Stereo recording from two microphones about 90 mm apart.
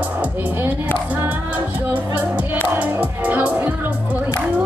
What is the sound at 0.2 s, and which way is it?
Music, 20° right (ahead or behind).